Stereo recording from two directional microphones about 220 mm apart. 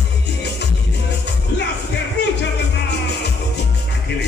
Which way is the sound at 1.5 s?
50° left (ahead or behind).